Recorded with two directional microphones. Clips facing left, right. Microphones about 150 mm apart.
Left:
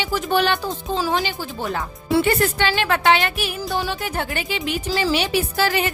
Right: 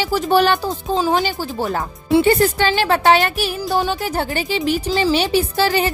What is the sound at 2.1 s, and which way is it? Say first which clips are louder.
Speech: right 5 dB; 30° right (ahead or behind).